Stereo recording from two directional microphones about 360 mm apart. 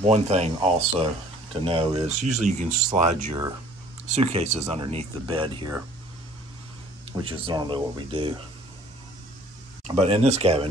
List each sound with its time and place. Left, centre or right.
0.0 s speech: centre
7.1 s speech: centre
9.8 s speech: centre